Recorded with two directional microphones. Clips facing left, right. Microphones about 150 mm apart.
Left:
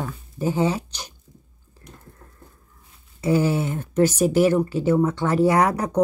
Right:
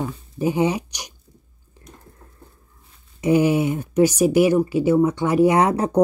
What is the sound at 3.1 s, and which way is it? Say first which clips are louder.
Speech: right 3 dB; 20° right (ahead or behind).